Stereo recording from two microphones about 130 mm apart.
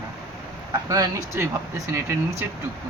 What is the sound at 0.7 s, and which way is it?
Speech, 30° right (ahead or behind).